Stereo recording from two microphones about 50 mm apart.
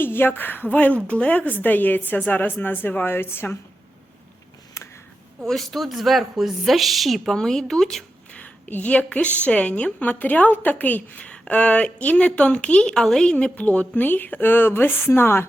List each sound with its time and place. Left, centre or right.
0.0 s a woman's voice: left
4.8 s a sound: left
5.4 s a woman's voice: centre
8.3 s a sound: left
9.4 s a woman's voice: left
13.0 s speech: centre
13.3 s a woman's voice: left
14.4 s speech: left